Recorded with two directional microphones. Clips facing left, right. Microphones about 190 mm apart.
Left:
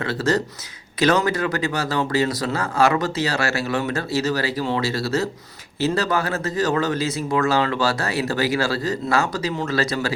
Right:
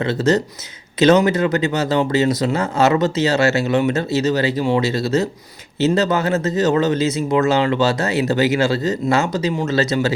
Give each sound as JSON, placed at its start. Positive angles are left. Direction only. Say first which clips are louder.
{"t": 0.0, "sound": "speech", "louder": "right 5 dB", "side_deg": -20}